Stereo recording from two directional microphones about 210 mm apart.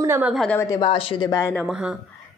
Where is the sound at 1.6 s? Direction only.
5° right (ahead or behind).